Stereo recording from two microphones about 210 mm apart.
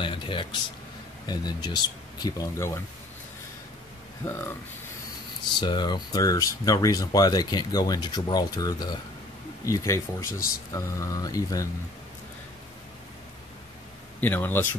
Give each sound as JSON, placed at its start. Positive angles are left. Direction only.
{"t": 0.0, "sound": "speech", "side_deg": 25}
{"t": 5.6, "sound": "speech", "side_deg": 20}
{"t": 14.2, "sound": "speech", "side_deg": 10}